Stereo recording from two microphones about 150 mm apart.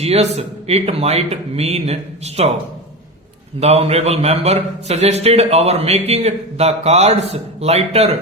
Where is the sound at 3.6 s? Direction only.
45° right (ahead or behind).